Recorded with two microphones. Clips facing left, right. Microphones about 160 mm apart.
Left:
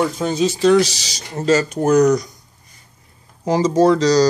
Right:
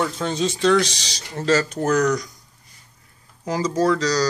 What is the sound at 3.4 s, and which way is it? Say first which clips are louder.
Speech: left 6 dB; 25° left (ahead or behind).